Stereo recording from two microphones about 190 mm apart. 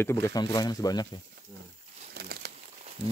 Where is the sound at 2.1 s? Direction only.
60° right (ahead or behind).